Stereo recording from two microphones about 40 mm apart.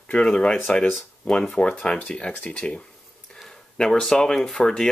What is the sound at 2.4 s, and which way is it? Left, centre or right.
Speech, left.